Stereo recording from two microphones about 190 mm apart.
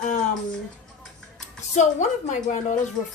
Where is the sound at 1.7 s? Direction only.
40° left (ahead or behind).